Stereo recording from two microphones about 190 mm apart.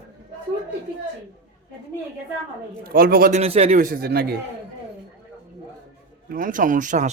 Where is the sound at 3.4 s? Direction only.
30° right (ahead or behind).